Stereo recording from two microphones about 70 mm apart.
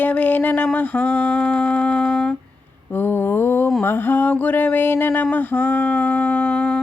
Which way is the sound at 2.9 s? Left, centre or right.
Left.